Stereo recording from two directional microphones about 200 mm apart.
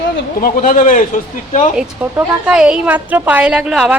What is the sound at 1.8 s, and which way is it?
A woman's voice, 5° right (ahead or behind).